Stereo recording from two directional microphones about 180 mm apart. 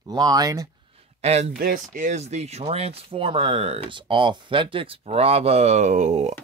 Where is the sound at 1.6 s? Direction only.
50° right (ahead or behind).